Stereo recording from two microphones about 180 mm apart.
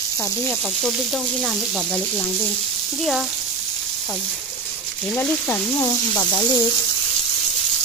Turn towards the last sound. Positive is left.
turn(degrees=20)  # may be behind; listen again after turning